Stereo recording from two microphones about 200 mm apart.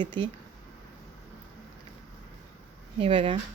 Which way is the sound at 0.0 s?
25° right (ahead or behind).